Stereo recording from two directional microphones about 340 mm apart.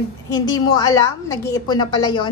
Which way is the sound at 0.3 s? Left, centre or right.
Centre.